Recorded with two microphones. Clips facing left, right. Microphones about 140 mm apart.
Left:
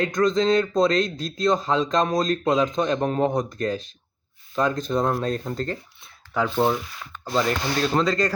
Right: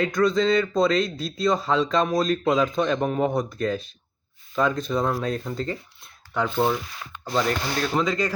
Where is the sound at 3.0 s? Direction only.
5° right (ahead or behind).